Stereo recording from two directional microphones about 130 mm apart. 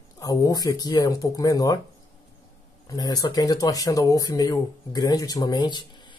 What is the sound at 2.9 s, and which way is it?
Speech, 30° left (ahead or behind).